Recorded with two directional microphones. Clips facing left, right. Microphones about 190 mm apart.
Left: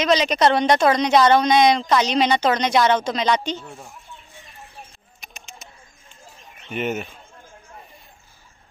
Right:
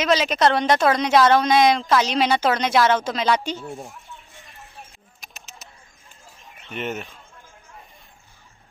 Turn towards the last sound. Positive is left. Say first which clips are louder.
# left 4 dB
turn(degrees=5)  # may be behind; listen again after turning